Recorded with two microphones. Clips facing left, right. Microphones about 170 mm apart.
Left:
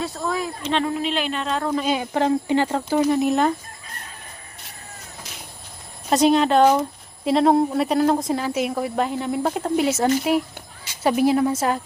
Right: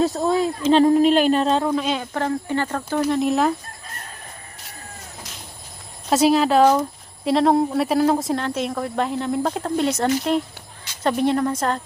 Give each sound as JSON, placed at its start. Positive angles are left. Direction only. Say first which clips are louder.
{"t": 0.0, "sound": "speech", "louder": "right 7 dB", "side_deg": -35}
{"t": 1.6, "sound": "speech", "louder": "right 1 dB", "side_deg": 0}
{"t": 2.0, "sound": "speech", "louder": "left 4 dB", "side_deg": 15}
{"t": 6.1, "sound": "speech", "louder": "even", "side_deg": 0}